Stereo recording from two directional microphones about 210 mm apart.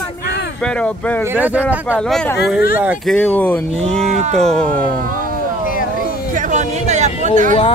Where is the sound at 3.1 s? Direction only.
10° left (ahead or behind).